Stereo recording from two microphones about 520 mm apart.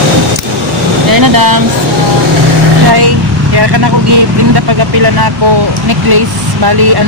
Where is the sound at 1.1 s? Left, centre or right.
Right.